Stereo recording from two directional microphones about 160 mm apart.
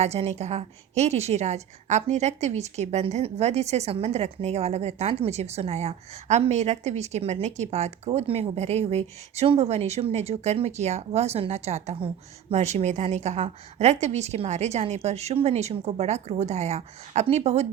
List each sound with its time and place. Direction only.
0.0 s a woman's voice: 40° right (ahead or behind)